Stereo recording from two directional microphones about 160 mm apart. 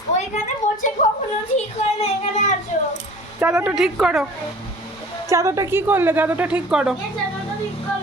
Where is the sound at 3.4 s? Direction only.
10° right (ahead or behind).